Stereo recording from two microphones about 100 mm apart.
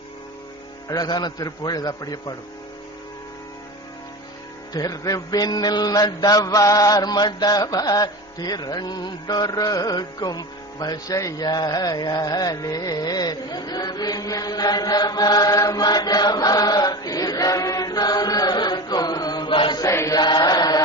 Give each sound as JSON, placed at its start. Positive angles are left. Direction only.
{"t": 0.8, "sound": "mantra", "side_deg": 40}
{"t": 4.7, "sound": "mantra", "side_deg": 35}
{"t": 19.8, "sound": "chant", "side_deg": 30}
{"t": 20.2, "sound": "chant", "side_deg": 45}